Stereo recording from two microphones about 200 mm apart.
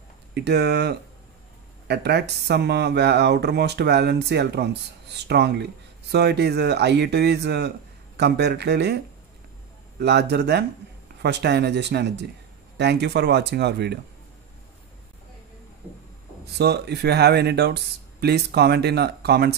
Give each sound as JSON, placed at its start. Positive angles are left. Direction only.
{"t": 0.3, "sound": "speech", "side_deg": -55}
{"t": 16.5, "sound": "speech", "side_deg": -55}